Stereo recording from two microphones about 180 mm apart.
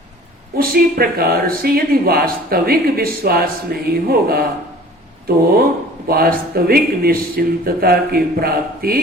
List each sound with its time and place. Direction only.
0.5 s speech: 55° right (ahead or behind)
6.1 s speech: 55° right (ahead or behind)